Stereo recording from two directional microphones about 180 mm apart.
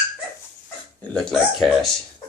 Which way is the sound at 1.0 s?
Centre (ahead or behind).